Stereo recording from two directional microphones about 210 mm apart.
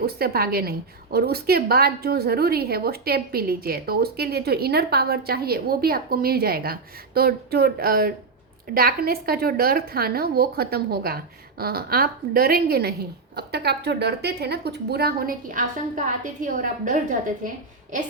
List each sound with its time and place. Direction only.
0.0 s a woman's voice: 45° right (ahead or behind)